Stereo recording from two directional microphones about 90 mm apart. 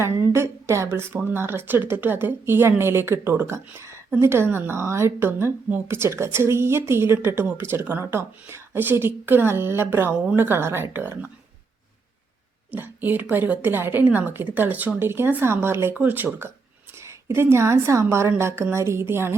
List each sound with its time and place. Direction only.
0.0 s a woman's voice: 30° right (ahead or behind)
12.7 s a woman's voice: 20° right (ahead or behind)
17.0 s a woman's voice: 30° right (ahead or behind)